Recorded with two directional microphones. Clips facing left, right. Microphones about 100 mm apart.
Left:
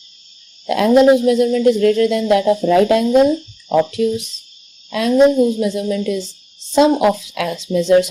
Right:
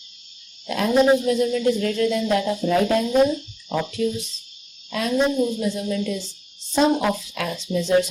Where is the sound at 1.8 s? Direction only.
90° left.